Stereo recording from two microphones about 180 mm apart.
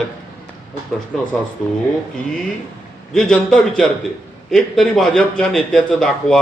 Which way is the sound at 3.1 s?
5° left (ahead or behind).